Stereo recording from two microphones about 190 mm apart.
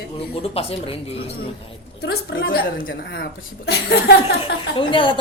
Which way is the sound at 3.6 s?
60° left (ahead or behind).